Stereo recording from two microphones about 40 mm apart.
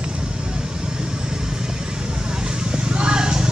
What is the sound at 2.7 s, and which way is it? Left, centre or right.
Vehicle, right.